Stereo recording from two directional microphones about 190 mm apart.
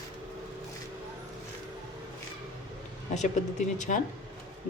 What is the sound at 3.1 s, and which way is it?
Speech, 40° left (ahead or behind).